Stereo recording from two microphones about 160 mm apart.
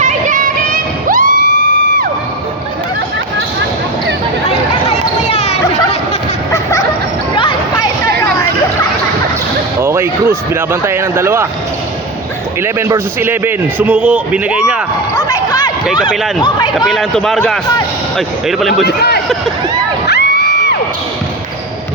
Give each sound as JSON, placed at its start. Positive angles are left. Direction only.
{"t": 0.0, "sound": "music", "side_deg": -55}
{"t": 4.9, "sound": "basketball bounce", "side_deg": 40}
{"t": 6.5, "sound": "bow-wow", "side_deg": 20}
{"t": 9.8, "sound": "speech", "side_deg": -15}
{"t": 12.6, "sound": "a man's voice", "side_deg": -15}
{"t": 15.2, "sound": "a sound", "side_deg": 25}
{"t": 16.4, "sound": "speech", "side_deg": 30}
{"t": 16.9, "sound": "a man's voice", "side_deg": 0}
{"t": 18.9, "sound": "speech", "side_deg": 90}
{"t": 20.1, "sound": "crowd", "side_deg": 90}